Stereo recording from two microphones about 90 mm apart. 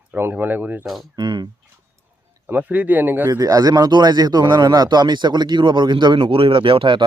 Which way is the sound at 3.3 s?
40° right (ahead or behind).